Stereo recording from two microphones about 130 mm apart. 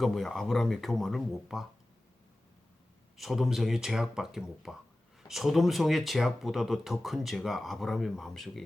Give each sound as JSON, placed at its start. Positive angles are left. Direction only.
{"t": 0.0, "sound": "speech", "side_deg": 0}
{"t": 3.2, "sound": "speech", "side_deg": 0}